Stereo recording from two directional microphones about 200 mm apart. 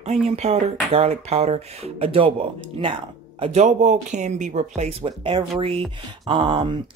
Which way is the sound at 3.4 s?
30° right (ahead or behind).